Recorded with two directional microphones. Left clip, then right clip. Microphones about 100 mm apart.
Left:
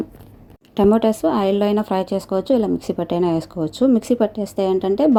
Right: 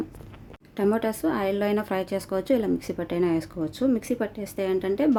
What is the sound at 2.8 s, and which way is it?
A woman's voice, 40° left (ahead or behind).